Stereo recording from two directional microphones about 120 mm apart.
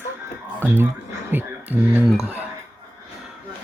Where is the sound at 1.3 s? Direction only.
15° right (ahead or behind).